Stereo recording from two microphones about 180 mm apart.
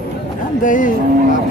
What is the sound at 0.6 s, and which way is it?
Speech, 45° left (ahead or behind).